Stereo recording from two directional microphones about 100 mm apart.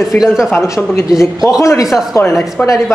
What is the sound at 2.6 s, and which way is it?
Speech, 15° left (ahead or behind).